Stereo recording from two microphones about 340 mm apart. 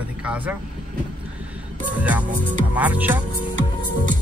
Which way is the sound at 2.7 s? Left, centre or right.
Centre.